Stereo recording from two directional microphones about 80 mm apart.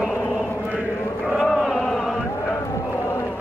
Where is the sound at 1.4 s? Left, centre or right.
Centre.